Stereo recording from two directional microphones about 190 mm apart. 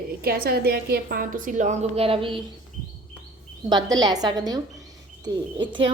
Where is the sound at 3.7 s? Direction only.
20° right (ahead or behind).